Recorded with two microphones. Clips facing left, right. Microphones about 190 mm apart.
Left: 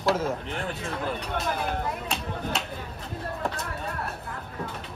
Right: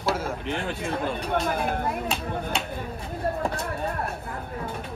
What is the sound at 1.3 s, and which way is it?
Speech, 50° right (ahead or behind).